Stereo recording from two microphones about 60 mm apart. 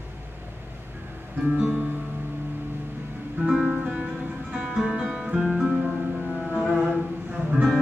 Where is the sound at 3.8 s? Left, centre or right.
Centre.